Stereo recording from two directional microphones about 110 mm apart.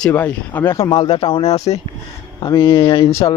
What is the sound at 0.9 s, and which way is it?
Speech, 55° left (ahead or behind).